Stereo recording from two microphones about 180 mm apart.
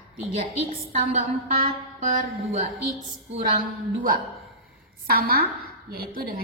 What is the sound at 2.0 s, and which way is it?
Speech, 40° right (ahead or behind).